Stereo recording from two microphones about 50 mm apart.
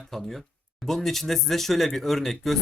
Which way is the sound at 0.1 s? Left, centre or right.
Centre.